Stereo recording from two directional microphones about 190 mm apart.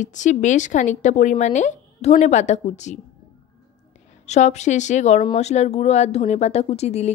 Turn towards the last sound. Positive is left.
turn(degrees=35)  # may be behind; listen again after turning